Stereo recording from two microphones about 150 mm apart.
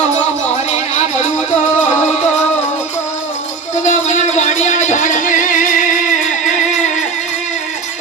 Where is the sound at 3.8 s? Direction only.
50° left (ahead or behind).